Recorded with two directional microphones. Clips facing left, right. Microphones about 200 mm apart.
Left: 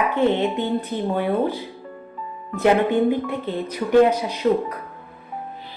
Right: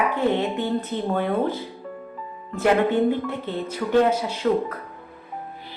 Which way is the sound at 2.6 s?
15° left (ahead or behind).